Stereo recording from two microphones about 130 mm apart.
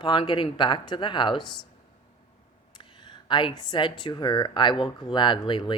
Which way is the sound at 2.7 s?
35° left (ahead or behind).